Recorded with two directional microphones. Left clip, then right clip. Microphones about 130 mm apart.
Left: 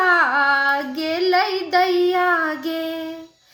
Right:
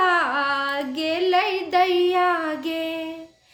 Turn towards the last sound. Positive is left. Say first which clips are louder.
# left 1 dB
turn(degrees=-15)  # may be behind; listen again after turning